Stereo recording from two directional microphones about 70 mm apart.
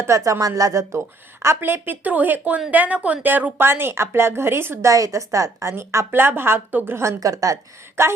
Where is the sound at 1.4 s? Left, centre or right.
Right.